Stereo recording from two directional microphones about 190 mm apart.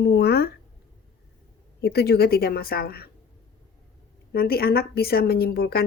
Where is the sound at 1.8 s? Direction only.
55° left (ahead or behind).